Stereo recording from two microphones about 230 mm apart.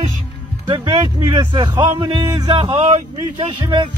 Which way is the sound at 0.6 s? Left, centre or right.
Centre.